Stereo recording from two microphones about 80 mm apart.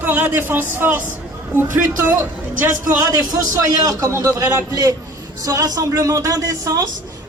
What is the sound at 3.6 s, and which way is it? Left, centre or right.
Speech, right.